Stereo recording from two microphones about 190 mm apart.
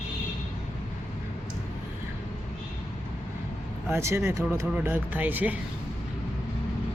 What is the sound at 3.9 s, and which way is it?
Speech, 15° right (ahead or behind).